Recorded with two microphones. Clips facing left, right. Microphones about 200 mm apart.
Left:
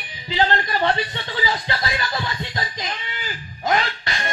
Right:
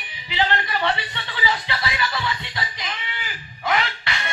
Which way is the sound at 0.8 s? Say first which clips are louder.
Left 3 dB; 45° left (ahead or behind).